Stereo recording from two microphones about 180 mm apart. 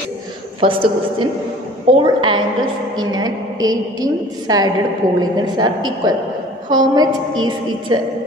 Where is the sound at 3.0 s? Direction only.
20° right (ahead or behind).